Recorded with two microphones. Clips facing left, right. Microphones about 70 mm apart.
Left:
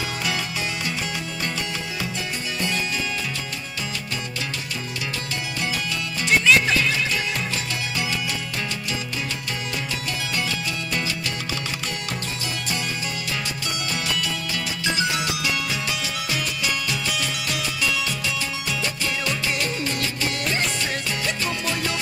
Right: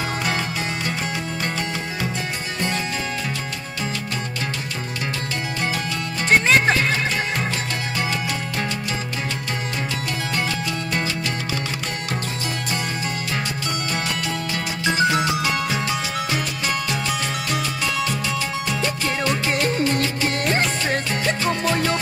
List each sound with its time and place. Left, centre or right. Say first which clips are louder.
6.2 s music: right 2 dB; right
14.1 s music: right 2 dB; right
18.7 s music: right 2 dB; right